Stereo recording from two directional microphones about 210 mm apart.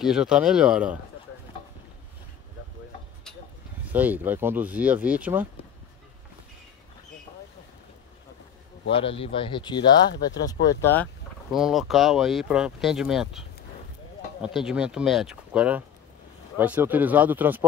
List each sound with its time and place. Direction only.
0.0 s speech: 5° right (ahead or behind)
3.9 s speech: 10° right (ahead or behind)
8.9 s speech: 25° left (ahead or behind); by 11.1 s 10° left (ahead or behind)
11.5 s speech: centre (ahead or behind)
14.4 s speech: 5° right (ahead or behind)